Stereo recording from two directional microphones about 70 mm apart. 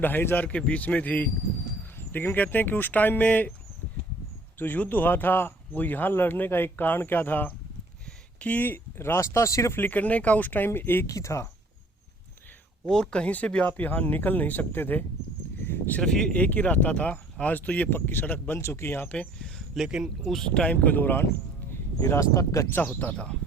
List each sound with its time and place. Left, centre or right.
0.0 s speech: left
4.5 s speech: left
9.7 s speech: left
11.0 s speech: left
12.9 s speech: centre; by 15.0 s left
15.6 s a sound: left
16.0 s speech: centre
16.3 s speech: left
19.0 s speech: centre
19.8 s speech: centre
20.2 s speech: centre; by 21.2 s left
22.0 s speech: left
22.7 s speech: left
23.1 s speech: centre